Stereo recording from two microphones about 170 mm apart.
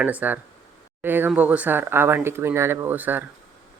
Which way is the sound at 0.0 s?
10° right (ahead or behind).